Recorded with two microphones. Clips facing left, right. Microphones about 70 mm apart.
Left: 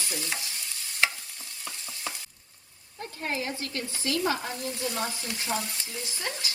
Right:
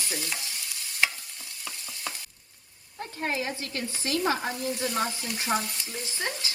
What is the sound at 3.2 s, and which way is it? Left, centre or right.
Speech, right.